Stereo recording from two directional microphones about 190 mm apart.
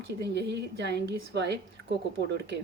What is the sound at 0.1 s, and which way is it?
A woman's voice, 60° right (ahead or behind).